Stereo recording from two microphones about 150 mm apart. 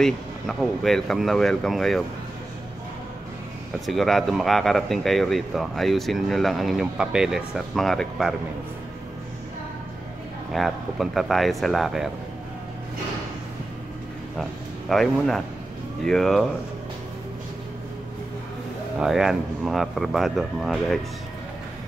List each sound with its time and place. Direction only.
0.0 s speech: centre (ahead or behind)
3.8 s speech: centre (ahead or behind)
10.5 s speech: centre (ahead or behind)
14.3 s speech: centre (ahead or behind)
18.9 s speech: 5° right (ahead or behind)